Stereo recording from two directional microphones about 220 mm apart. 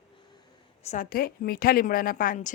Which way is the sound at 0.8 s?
35° left (ahead or behind).